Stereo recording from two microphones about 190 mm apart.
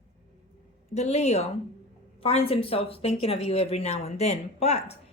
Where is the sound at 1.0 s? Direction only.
35° left (ahead or behind).